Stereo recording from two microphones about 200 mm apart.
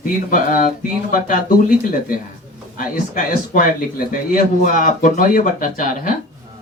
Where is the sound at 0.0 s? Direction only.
45° left (ahead or behind).